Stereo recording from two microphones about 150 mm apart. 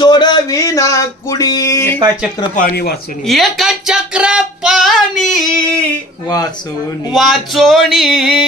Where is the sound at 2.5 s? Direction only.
80° left.